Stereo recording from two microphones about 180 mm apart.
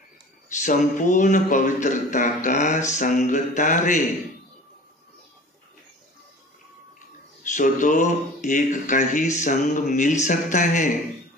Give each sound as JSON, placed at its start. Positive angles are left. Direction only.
{"t": 0.6, "sound": "speech", "side_deg": 45}
{"t": 7.4, "sound": "speech", "side_deg": 45}